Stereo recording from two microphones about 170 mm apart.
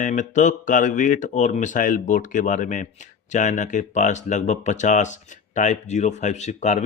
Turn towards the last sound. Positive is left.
turn(degrees=45)  # may be behind; listen again after turning